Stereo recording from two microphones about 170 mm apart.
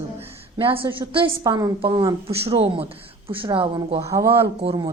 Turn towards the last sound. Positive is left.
turn(degrees=-35)  # may be behind; listen again after turning